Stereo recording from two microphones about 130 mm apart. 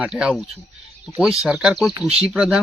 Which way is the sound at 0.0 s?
5° right (ahead or behind).